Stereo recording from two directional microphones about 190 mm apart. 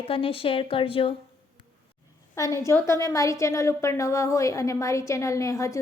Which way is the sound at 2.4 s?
15° left (ahead or behind).